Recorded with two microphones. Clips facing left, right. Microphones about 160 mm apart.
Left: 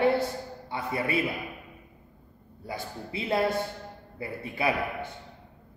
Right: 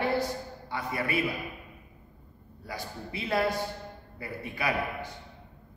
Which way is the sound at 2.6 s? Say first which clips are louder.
Left 2 dB; 25° left (ahead or behind).